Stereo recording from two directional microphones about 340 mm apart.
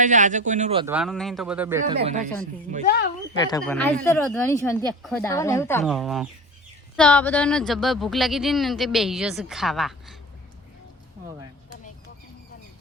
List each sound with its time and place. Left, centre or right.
0.0 s speech: right
0.9 s speech: centre
1.8 s speech: centre
3.3 s speech: centre